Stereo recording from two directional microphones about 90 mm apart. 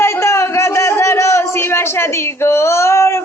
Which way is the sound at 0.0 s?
30° left (ahead or behind).